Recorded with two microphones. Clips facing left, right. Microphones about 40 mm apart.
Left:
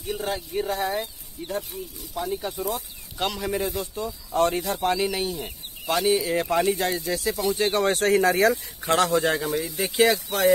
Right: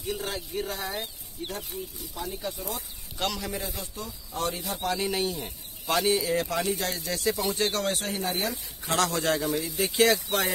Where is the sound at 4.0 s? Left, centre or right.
Left.